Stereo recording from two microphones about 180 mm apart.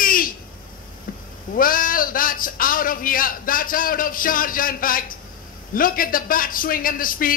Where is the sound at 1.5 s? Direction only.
50° left (ahead or behind).